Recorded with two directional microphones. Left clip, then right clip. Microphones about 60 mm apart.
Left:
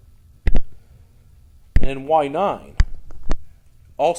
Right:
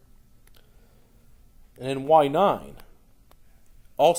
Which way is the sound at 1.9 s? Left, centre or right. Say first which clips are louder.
Even; centre.